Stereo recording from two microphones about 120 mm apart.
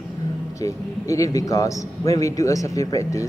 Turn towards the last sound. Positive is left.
turn(degrees=25)  # may be behind; listen again after turning